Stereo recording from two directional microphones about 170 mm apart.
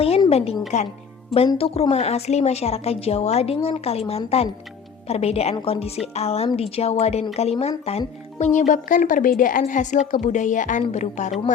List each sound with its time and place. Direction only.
0.3 s a woman's voice: 35° left (ahead or behind)